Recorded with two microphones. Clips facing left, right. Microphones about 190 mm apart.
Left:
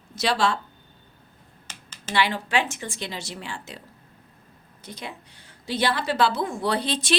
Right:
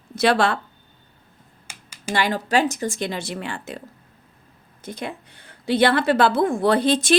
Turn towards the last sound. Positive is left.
turn(degrees=-50)  # may be behind; listen again after turning